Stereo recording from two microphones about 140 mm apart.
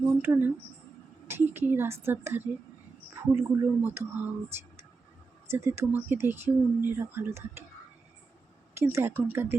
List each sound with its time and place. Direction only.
0.2 s speech: 15° right (ahead or behind)
8.8 s speech: 20° right (ahead or behind)